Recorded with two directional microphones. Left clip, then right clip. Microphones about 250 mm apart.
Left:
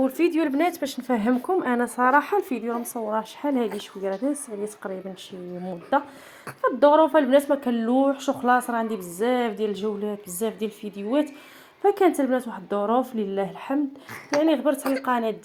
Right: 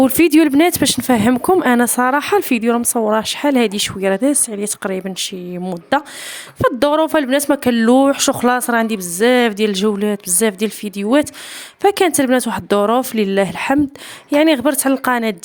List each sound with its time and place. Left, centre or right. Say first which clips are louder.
0.0 s speech: right 11 dB; right
11.8 s speech: right 6 dB; right